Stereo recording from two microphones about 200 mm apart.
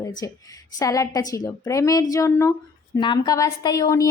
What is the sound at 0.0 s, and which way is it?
A woman's voice, 20° left (ahead or behind).